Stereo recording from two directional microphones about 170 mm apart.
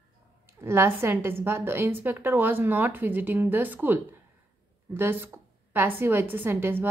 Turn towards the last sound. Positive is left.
turn(degrees=-15)  # may be behind; listen again after turning